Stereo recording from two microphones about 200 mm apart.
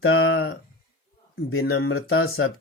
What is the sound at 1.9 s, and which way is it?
Speech, 90° left.